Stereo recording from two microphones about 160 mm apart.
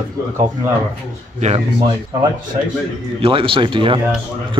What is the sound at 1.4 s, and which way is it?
Speech, 40° right (ahead or behind).